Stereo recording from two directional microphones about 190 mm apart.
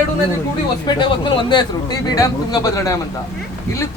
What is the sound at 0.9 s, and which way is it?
A man's voice, 25° left (ahead or behind).